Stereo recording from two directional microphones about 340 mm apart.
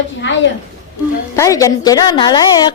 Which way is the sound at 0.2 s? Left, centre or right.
Left.